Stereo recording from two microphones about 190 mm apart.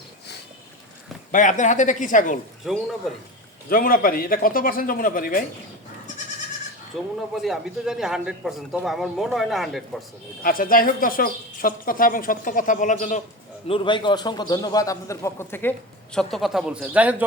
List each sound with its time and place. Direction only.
1.3 s speech: 40° left (ahead or behind)
2.6 s speech: centre (ahead or behind)
3.7 s speech: 50° left (ahead or behind)
7.2 s speech: centre (ahead or behind)
10.4 s speech: 50° left (ahead or behind)
13.7 s a man's voice: 25° left (ahead or behind); by 15.7 s 10° left (ahead or behind)
16.1 s speech: centre (ahead or behind)